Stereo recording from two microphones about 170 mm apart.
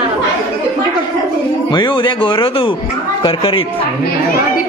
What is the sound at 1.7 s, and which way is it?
Speech, 30° left (ahead or behind).